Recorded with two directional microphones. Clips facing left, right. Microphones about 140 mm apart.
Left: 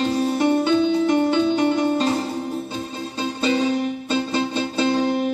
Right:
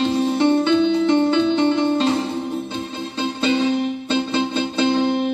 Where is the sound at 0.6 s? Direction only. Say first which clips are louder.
Right 1 dB; 40° left (ahead or behind).